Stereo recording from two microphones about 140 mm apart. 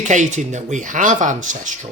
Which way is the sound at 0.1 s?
60° right (ahead or behind).